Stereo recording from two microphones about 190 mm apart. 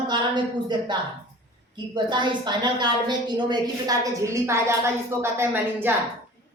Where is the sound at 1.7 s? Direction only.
25° right (ahead or behind).